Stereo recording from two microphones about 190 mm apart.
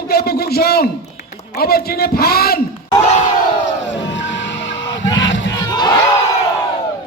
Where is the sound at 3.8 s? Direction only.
70° left (ahead or behind).